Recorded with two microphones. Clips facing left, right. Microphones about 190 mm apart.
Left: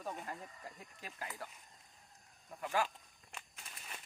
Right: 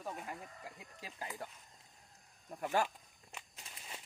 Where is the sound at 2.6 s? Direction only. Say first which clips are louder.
Right 2 dB; 20° right (ahead or behind).